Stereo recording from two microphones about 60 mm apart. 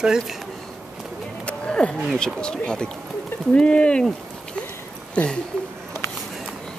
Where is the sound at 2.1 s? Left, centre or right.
Centre.